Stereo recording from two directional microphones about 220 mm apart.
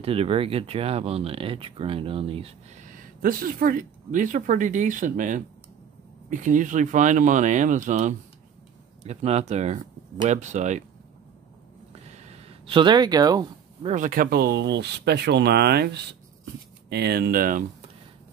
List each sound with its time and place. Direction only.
0.0 s speech: 25° right (ahead or behind)
12.1 s a sound: 25° right (ahead or behind)
13.9 s speech: 40° right (ahead or behind)